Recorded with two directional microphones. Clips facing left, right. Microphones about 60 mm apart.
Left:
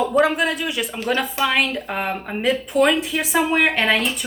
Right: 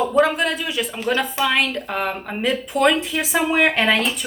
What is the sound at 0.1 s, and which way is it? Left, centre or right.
Speech, centre.